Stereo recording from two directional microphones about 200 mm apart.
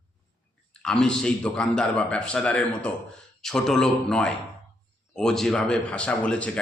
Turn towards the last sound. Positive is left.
turn(degrees=5)  # may be behind; listen again after turning